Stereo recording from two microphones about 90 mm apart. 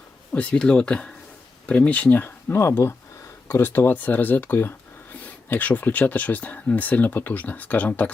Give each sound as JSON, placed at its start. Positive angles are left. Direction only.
{"t": 0.3, "sound": "speech", "side_deg": 10}